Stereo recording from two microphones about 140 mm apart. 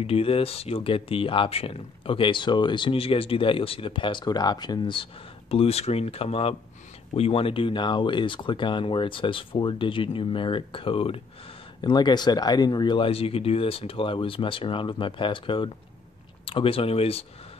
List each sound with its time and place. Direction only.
0.0 s speech: 40° left (ahead or behind)
5.5 s speech: 45° left (ahead or behind)